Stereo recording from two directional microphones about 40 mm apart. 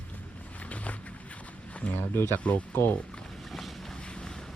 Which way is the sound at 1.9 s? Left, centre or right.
Left.